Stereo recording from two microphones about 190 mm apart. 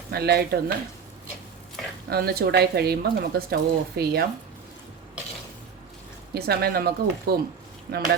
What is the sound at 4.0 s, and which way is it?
Speech, 55° right (ahead or behind).